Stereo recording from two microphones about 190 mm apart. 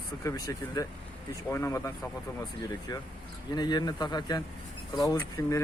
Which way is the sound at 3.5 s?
20° left (ahead or behind).